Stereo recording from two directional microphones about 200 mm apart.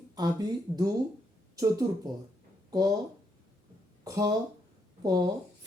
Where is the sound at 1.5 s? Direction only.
15° right (ahead or behind).